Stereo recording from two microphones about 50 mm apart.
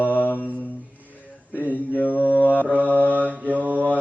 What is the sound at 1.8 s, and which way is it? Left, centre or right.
Mantra, left.